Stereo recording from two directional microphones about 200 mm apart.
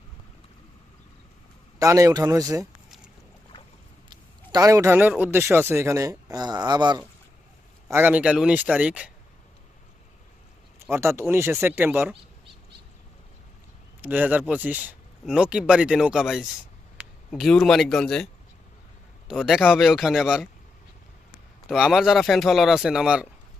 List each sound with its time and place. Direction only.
1.8 s a man's voice: 15° right (ahead or behind)
4.1 s a man's voice: 20° right (ahead or behind)
10.8 s a man's voice: 10° right (ahead or behind)
14.0 s speech: 10° right (ahead or behind)
19.3 s speech: centre (ahead or behind)
21.7 s speech: centre (ahead or behind)